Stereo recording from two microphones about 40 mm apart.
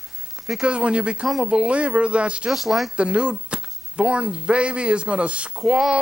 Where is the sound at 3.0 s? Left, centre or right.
Right.